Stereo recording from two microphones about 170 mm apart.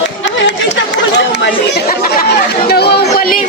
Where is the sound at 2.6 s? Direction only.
70° left (ahead or behind).